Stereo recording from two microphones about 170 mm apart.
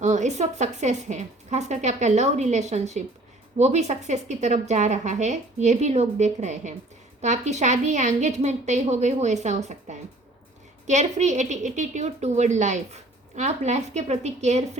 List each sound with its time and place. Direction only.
0.0 s a woman's voice: 45° right (ahead or behind)